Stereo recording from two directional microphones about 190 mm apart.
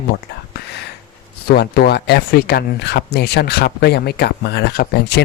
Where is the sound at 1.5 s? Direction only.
55° left (ahead or behind).